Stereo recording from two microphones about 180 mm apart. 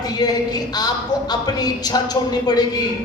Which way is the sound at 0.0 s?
20° left (ahead or behind).